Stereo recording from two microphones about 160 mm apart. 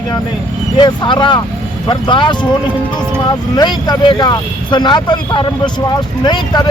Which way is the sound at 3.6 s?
25° left (ahead or behind).